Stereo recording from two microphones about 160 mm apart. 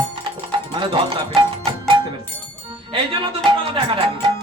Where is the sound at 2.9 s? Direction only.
30° right (ahead or behind).